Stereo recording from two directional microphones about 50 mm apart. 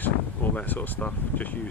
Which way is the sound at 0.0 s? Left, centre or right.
Left.